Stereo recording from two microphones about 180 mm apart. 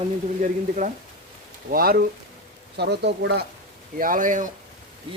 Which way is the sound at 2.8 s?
65° right (ahead or behind).